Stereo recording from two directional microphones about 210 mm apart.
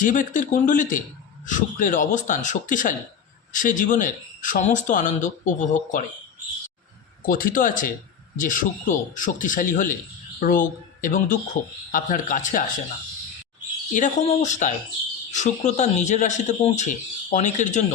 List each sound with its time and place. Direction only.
0.0 s speech: 40° left (ahead or behind)
7.3 s speech: 45° left (ahead or behind)
13.9 s speech: 35° left (ahead or behind)